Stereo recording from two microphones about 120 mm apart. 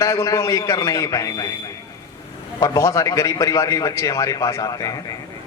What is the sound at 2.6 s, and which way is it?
A man's voice, 30° left (ahead or behind).